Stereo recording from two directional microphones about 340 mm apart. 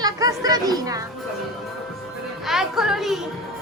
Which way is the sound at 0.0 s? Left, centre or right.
Centre.